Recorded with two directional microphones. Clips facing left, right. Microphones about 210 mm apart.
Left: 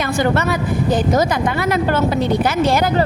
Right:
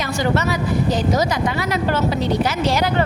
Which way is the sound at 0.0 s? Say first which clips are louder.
Left 3 dB; 55° left (ahead or behind).